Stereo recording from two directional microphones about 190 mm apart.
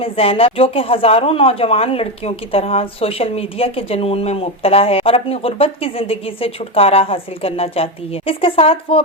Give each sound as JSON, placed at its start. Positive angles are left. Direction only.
{"t": 0.0, "sound": "speech", "side_deg": 30}